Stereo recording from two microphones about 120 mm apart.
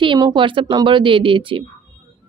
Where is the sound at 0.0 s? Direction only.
40° right (ahead or behind).